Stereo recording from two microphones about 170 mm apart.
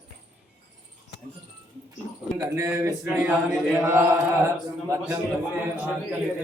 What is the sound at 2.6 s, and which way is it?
Speech, 15° right (ahead or behind).